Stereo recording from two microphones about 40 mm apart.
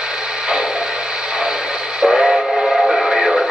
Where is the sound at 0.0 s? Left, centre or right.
Right.